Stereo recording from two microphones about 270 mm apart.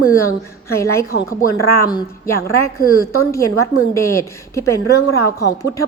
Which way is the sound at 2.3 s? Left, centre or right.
Left.